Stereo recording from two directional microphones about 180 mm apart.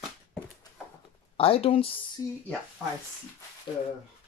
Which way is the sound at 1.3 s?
30° left (ahead or behind).